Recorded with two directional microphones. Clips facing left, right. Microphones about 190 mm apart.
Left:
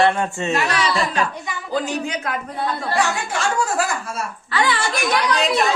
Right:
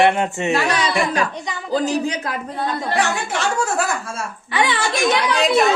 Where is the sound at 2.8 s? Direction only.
20° right (ahead or behind).